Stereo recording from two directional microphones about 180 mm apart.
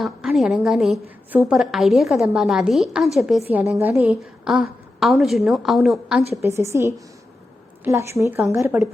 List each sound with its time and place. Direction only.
0.0 s a woman's voice: centre (ahead or behind)
6.4 s a woman's voice: 15° right (ahead or behind)